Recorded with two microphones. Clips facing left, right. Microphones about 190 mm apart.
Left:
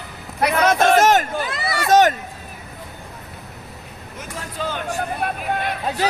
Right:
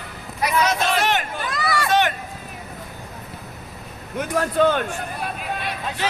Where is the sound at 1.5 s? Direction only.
25° left (ahead or behind).